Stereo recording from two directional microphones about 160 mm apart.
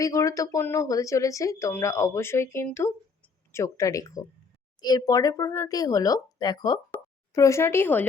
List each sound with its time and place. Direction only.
0.0 s speech: 20° left (ahead or behind)